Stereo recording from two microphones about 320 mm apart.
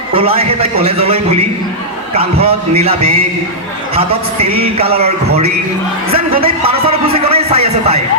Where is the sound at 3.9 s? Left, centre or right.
Centre.